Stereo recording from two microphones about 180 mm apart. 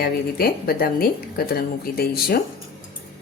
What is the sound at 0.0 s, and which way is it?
A woman's voice, 55° left (ahead or behind).